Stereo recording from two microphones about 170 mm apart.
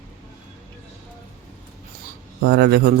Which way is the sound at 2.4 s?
75° right (ahead or behind).